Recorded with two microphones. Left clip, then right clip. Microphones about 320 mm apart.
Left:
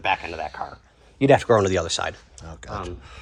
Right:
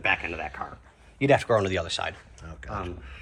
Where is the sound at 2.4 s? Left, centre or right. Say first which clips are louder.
Left 2 dB; centre.